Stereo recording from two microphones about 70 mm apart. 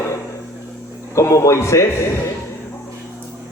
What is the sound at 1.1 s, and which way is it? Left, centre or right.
Speech, left.